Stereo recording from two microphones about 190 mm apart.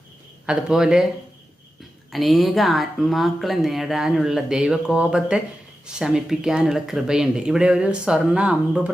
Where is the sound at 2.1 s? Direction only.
Centre (ahead or behind).